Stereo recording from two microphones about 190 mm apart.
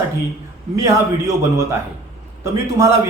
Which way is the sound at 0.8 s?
15° right (ahead or behind).